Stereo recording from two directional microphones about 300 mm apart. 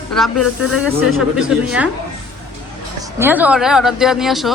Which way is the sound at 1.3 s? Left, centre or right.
Centre.